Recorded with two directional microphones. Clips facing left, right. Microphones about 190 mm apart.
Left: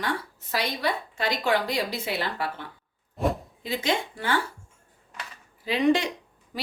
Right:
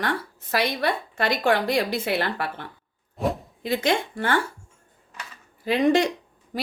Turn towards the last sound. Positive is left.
turn(degrees=-50)  # may be behind; listen again after turning